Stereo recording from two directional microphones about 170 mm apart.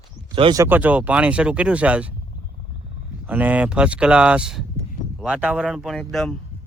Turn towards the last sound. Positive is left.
turn(degrees=0)  # may be behind; listen again after turning